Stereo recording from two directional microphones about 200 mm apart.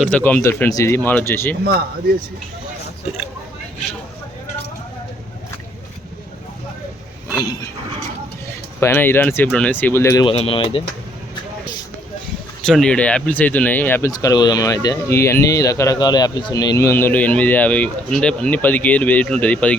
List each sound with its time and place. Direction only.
0.0 s speech: 10° left (ahead or behind)
7.3 s a sound: 15° left (ahead or behind)
8.8 s speech: 10° left (ahead or behind)
10.2 s speech: 30° left (ahead or behind)
12.6 s speech: 5° left (ahead or behind)